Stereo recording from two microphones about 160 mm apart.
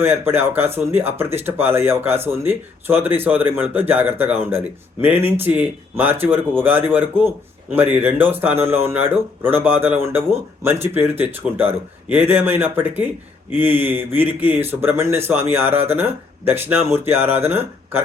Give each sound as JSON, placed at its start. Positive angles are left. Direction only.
{"t": 0.0, "sound": "speech", "side_deg": -15}